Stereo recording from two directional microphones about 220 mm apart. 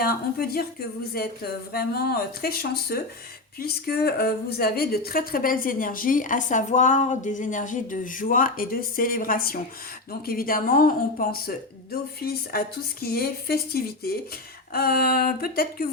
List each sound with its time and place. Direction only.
0.0 s speech: 45° left (ahead or behind)